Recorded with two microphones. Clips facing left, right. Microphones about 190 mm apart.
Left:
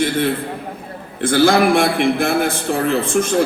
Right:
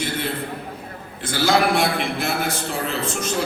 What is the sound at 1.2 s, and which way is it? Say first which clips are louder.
A man's voice: left 6 dB; 55° left (ahead or behind).